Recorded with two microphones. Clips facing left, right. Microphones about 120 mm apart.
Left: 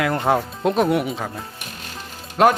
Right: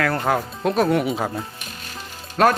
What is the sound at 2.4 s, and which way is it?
Speech, 20° left (ahead or behind).